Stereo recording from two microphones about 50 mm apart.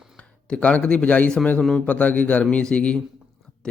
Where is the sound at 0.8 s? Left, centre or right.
Left.